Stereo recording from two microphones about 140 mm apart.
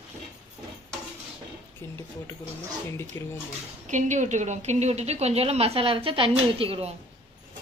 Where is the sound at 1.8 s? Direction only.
20° left (ahead or behind).